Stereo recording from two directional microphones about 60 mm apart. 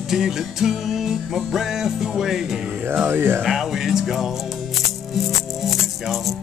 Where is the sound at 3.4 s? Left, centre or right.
Centre.